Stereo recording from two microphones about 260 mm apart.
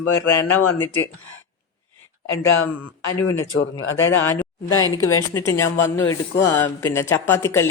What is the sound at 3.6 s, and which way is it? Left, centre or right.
Speech, left.